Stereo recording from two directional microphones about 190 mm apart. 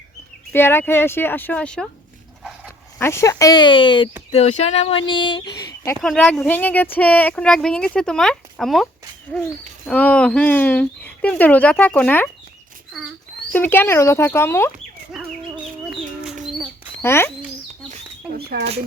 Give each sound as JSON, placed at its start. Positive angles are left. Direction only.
{"t": 0.5, "sound": "speech", "side_deg": 10}
{"t": 3.0, "sound": "speech", "side_deg": 15}
{"t": 6.0, "sound": "speech", "side_deg": 5}
{"t": 15.1, "sound": "chicken", "side_deg": 0}
{"t": 15.9, "sound": "bird", "side_deg": -5}
{"t": 17.0, "sound": "speech", "side_deg": 10}
{"t": 18.3, "sound": "a sound", "side_deg": -60}